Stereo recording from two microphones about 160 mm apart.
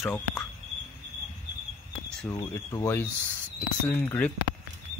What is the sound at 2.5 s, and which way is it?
Speech, 15° left (ahead or behind).